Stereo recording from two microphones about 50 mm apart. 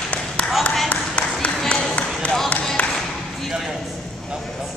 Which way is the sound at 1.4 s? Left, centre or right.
Centre.